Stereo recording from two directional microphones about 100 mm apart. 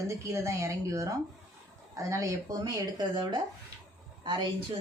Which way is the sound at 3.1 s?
55° right (ahead or behind).